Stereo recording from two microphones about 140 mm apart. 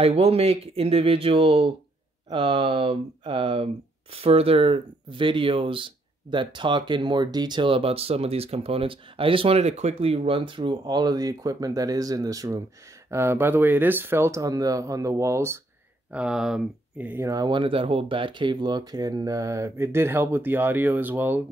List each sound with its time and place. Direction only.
0.0 s speech: 45° right (ahead or behind); by 15.6 s 20° right (ahead or behind)
16.1 s speech: 5° right (ahead or behind)
17.1 s speech: 20° right (ahead or behind)